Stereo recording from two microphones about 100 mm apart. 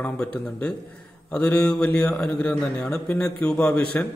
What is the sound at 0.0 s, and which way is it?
A man's voice, 15° left (ahead or behind).